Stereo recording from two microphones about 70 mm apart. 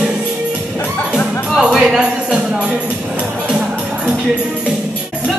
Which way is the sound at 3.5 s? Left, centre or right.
Centre.